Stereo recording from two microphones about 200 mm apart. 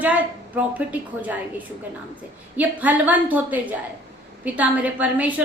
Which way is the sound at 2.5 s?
10° right (ahead or behind).